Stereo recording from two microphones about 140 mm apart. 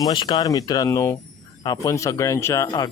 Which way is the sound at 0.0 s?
35° left (ahead or behind).